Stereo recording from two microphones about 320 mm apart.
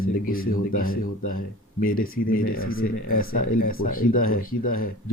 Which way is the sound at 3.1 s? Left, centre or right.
Left.